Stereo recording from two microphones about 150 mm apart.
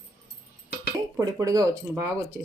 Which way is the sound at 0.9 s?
25° right (ahead or behind).